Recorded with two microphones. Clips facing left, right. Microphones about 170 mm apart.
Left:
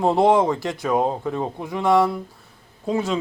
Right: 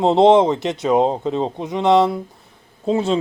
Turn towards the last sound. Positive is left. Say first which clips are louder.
# right 4 dB
turn(degrees=-25)  # may be behind; listen again after turning